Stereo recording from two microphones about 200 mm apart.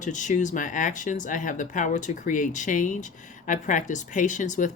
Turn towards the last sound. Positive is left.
turn(degrees=40)  # may be behind; listen again after turning